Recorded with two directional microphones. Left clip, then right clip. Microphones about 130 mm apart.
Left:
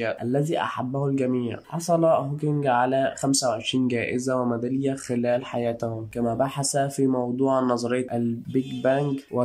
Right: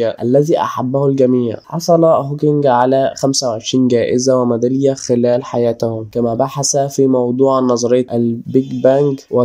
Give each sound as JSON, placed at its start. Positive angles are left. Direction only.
{"t": 0.0, "sound": "speech", "side_deg": -45}